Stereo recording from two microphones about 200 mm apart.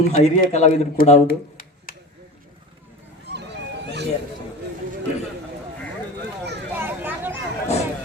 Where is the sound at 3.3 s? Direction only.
60° right (ahead or behind).